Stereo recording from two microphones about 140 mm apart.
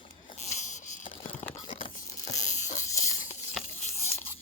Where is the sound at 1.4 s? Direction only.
65° left (ahead or behind).